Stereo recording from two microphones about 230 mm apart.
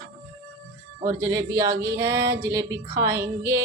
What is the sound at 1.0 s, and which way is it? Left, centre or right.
A woman's voice, centre.